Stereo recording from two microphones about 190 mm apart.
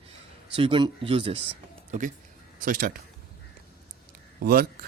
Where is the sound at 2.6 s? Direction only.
50° right (ahead or behind).